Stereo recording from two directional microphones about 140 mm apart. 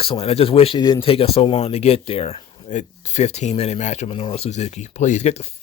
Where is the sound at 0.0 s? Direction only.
45° left (ahead or behind).